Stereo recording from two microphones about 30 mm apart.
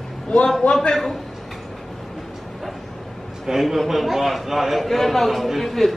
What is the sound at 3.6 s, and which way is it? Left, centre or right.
A man's voice, centre.